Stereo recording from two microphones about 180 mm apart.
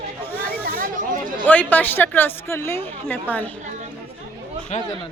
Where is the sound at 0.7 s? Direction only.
50° right (ahead or behind).